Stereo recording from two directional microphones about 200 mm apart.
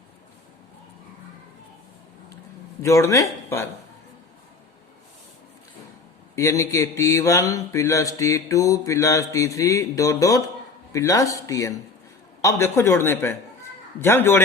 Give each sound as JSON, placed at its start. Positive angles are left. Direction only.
{"t": 2.8, "sound": "speech", "side_deg": 15}
{"t": 6.3, "sound": "speech", "side_deg": 15}